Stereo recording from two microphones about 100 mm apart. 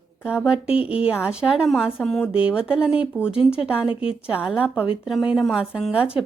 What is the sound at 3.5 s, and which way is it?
A woman's voice, 10° right (ahead or behind).